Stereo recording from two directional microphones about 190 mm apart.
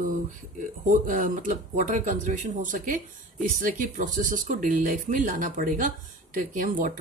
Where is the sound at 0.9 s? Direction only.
45° right (ahead or behind).